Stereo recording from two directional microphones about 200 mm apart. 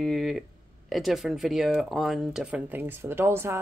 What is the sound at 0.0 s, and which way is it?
Speech, centre (ahead or behind).